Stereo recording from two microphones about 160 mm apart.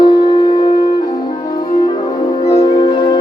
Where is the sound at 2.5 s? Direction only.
25° left (ahead or behind).